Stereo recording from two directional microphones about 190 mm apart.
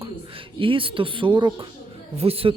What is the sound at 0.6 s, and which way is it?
A man's voice, 25° right (ahead or behind).